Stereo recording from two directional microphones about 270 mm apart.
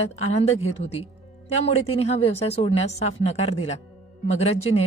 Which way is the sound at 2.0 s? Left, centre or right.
Left.